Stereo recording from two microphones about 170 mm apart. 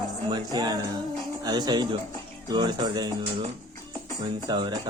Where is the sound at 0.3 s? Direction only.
25° right (ahead or behind).